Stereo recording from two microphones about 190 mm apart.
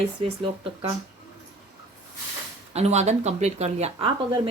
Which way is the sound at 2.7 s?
35° right (ahead or behind).